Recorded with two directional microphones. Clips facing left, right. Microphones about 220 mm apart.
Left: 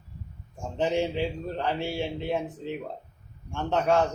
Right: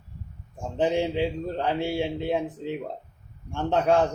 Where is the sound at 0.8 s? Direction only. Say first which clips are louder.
Right 2 dB; 15° right (ahead or behind).